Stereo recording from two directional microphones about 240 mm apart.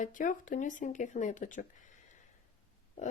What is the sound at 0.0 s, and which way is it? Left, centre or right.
Speech, left.